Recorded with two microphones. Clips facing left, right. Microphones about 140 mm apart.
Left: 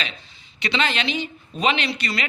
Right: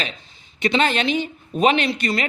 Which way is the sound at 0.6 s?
45° right (ahead or behind).